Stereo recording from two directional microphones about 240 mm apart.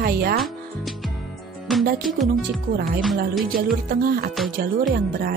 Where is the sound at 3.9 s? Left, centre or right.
Right.